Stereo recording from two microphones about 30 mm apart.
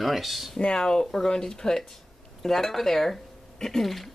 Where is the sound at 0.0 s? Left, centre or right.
Centre.